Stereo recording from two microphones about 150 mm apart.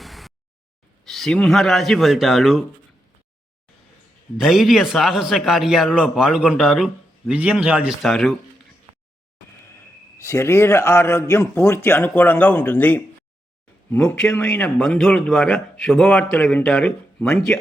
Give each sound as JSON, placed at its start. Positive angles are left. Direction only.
{"t": 0.0, "sound": "a sound", "side_deg": 0}
{"t": 1.0, "sound": "a man's voice", "side_deg": 0}
{"t": 4.4, "sound": "a man's voice", "side_deg": 0}
{"t": 10.2, "sound": "a man's voice", "side_deg": 20}